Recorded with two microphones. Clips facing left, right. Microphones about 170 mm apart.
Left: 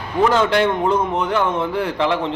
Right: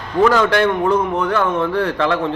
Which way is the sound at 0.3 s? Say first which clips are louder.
Right 1 dB; 20° left (ahead or behind).